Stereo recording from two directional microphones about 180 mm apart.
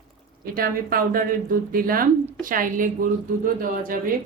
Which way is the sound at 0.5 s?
55° right (ahead or behind).